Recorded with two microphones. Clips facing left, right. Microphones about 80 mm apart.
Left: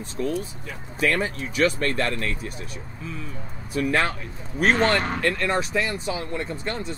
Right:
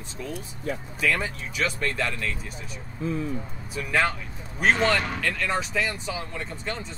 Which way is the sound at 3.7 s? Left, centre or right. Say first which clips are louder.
Left 2 dB; left.